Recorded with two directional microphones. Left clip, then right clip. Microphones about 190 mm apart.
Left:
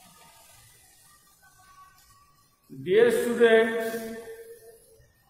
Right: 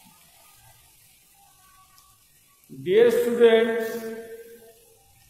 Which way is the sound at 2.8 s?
25° right (ahead or behind).